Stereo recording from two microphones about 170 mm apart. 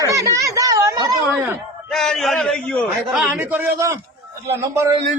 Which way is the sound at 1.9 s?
Centre (ahead or behind).